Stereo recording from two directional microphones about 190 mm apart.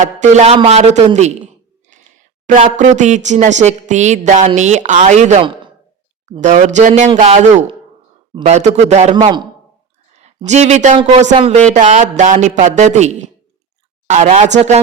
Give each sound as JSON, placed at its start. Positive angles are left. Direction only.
{"t": 0.0, "sound": "speech", "side_deg": -40}
{"t": 2.5, "sound": "speech", "side_deg": -40}
{"t": 8.4, "sound": "speech", "side_deg": -35}
{"t": 9.1, "sound": "a man's voice", "side_deg": -25}
{"t": 10.2, "sound": "speech", "side_deg": -35}